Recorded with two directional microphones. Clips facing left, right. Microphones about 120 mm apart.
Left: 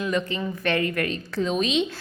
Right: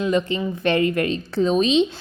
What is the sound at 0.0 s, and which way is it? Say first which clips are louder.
A woman's voice: right 5 dB; 30° right (ahead or behind).